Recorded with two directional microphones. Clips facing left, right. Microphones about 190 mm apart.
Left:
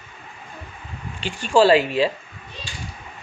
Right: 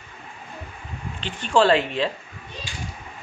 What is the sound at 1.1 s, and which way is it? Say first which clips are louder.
Speech: left 3 dB; 10° left (ahead or behind).